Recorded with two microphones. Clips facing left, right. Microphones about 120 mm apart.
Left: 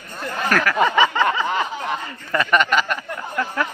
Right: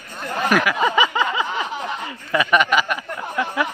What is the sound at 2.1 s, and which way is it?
Speech, 5° right (ahead or behind).